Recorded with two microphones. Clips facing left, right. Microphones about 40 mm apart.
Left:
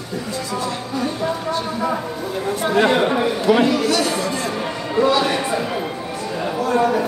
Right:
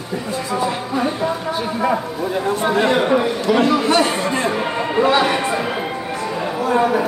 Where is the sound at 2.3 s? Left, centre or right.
Right.